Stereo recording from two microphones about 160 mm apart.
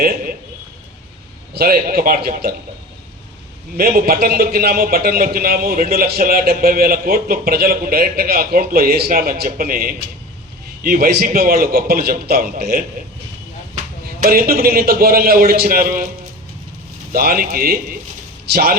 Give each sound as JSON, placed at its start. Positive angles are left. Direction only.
{"t": 1.5, "sound": "a man's voice", "side_deg": -70}
{"t": 3.8, "sound": "a man's voice", "side_deg": -65}
{"t": 14.3, "sound": "a man's voice", "side_deg": -65}
{"t": 17.1, "sound": "a man's voice", "side_deg": -65}